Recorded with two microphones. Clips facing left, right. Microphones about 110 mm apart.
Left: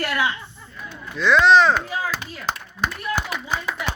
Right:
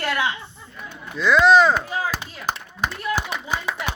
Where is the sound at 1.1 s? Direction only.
5° right (ahead or behind).